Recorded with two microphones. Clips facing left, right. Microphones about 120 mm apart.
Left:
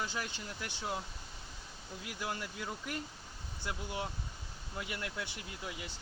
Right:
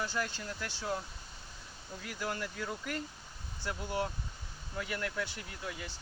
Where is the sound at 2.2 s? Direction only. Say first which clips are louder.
Right 3 dB; 15° left (ahead or behind).